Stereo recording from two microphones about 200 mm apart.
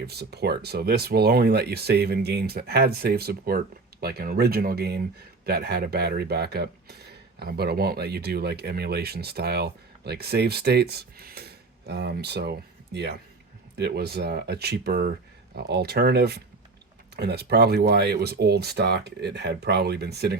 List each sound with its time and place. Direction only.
0.0 s speech: 55° right (ahead or behind)